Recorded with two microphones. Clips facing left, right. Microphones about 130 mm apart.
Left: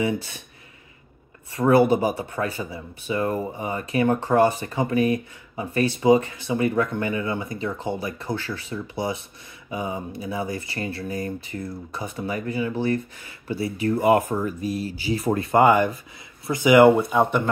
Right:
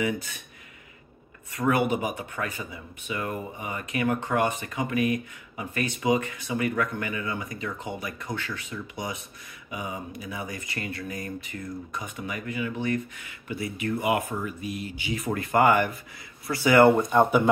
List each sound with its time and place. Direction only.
0.0 s speech: 30° left (ahead or behind)
1.5 s speech: 30° left (ahead or behind); by 16.9 s 15° left (ahead or behind)
16.9 s speech: 5° left (ahead or behind)